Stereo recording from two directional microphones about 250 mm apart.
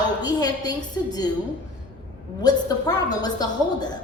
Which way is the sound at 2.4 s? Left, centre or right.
Centre.